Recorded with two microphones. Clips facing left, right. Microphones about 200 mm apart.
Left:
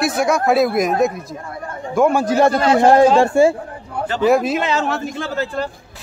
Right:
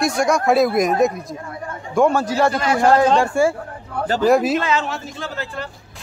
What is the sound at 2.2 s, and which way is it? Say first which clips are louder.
A man's voice: left 4 dB; 20° left (ahead or behind).